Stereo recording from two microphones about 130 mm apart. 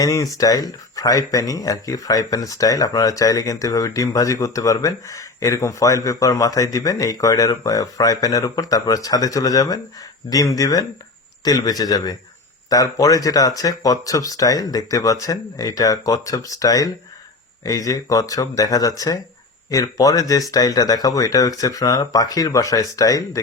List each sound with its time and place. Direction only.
0.0 s speech: 25° left (ahead or behind)